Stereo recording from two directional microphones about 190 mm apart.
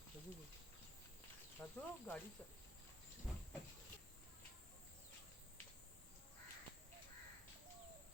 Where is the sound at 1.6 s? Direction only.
10° left (ahead or behind).